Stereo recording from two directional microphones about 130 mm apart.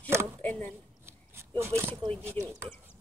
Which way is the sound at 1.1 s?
20° right (ahead or behind).